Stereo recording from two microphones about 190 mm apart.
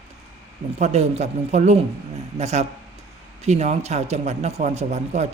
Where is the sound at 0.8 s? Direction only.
35° right (ahead or behind).